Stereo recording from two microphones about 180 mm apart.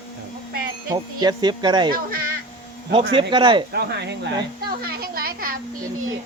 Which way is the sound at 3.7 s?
70° right (ahead or behind).